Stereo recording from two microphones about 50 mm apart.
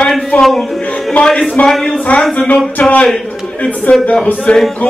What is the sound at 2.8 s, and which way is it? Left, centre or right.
A man's voice, left.